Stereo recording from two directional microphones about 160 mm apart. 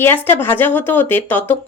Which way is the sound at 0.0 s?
15° left (ahead or behind).